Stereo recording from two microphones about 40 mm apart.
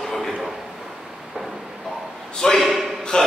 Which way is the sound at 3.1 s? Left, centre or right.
Centre.